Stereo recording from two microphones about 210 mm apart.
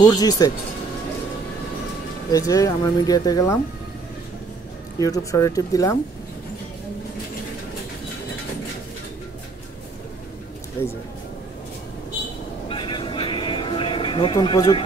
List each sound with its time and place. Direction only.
0.0 s speech: 15° left (ahead or behind)
2.3 s speech: 15° left (ahead or behind)
4.9 s speech: 15° left (ahead or behind)
12.6 s music: 25° left (ahead or behind)